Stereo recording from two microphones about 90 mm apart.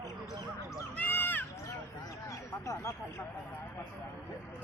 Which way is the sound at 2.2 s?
35° left (ahead or behind).